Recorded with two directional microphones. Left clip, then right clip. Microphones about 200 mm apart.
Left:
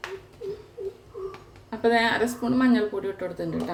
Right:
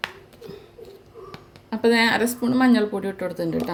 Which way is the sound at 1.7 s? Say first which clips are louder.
Right 3 dB; 50° right (ahead or behind).